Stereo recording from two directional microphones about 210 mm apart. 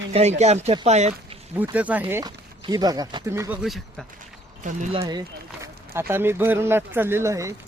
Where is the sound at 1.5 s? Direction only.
10° right (ahead or behind).